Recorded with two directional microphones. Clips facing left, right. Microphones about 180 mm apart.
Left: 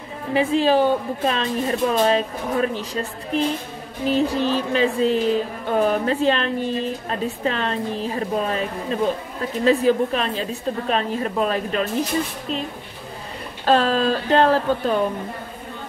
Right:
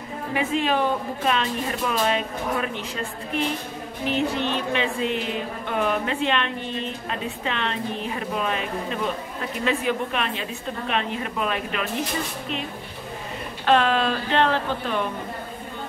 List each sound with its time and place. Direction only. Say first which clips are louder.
0.3 s speech: left 6 dB; 30° left (ahead or behind)
4.1 s speech: left 5 dB; 35° left (ahead or behind)
13.7 s speech: left 2 dB; 35° left (ahead or behind)